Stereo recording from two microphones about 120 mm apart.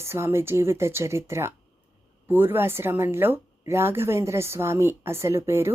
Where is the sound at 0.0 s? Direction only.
20° right (ahead or behind).